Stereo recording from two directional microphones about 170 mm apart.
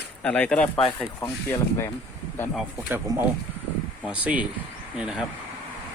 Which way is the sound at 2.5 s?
10° right (ahead or behind).